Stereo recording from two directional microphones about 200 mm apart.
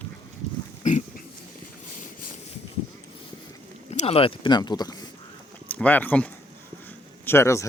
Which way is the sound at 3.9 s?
30° left (ahead or behind).